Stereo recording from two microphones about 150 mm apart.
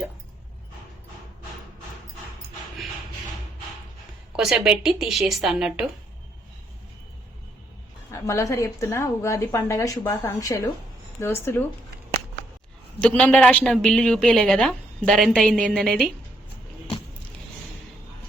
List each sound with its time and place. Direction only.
4.3 s a woman's voice: 5° right (ahead or behind)
8.1 s a woman's voice: 20° left (ahead or behind)
13.0 s a woman's voice: 10° left (ahead or behind)